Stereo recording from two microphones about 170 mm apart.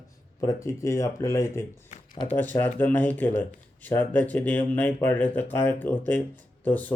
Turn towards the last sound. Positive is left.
turn(degrees=10)  # may be behind; listen again after turning